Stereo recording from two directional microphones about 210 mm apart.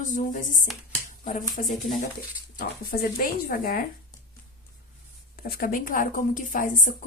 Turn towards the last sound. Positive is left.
turn(degrees=40)  # may be behind; listen again after turning